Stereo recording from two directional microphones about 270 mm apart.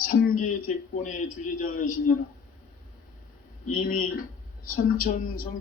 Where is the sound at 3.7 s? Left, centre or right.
Left.